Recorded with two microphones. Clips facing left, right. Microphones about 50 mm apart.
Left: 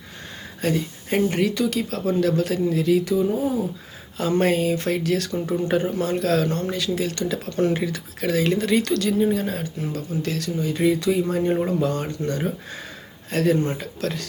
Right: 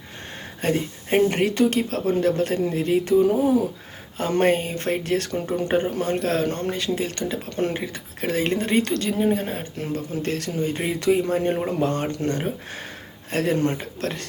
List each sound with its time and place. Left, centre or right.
0.6 s speech: right
3.0 s speech: right
4.2 s speech: right
9.7 s speech: right